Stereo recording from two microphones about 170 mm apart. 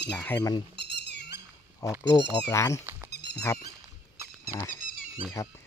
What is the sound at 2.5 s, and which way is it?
Speech, 15° left (ahead or behind).